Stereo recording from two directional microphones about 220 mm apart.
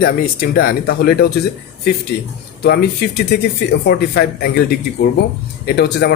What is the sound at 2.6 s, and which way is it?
Speech, 45° left (ahead or behind).